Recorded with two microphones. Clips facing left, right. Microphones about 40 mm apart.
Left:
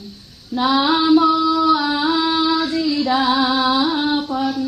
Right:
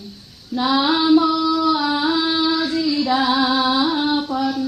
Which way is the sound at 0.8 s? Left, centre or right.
Centre.